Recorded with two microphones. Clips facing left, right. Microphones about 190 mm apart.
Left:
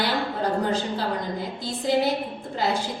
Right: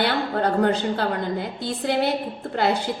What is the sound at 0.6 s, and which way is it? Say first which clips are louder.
A woman's voice: right 4 dB; 60° right (ahead or behind).